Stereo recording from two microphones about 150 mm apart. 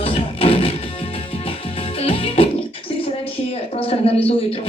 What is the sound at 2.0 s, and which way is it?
Music, 40° left (ahead or behind).